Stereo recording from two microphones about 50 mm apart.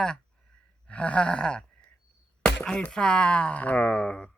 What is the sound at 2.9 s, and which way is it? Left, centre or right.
Speech, centre.